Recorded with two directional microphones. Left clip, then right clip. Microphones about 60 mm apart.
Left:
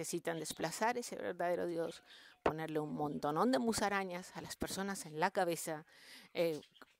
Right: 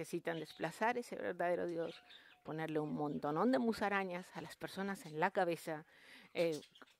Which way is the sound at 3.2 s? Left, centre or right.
Left.